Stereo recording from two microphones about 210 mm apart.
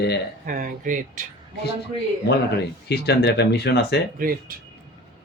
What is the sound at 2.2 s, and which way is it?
Speech, 50° left (ahead or behind).